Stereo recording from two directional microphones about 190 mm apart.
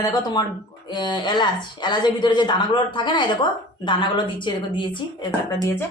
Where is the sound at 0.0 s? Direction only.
20° left (ahead or behind).